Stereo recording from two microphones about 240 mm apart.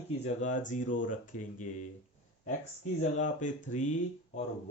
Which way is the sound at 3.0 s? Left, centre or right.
Left.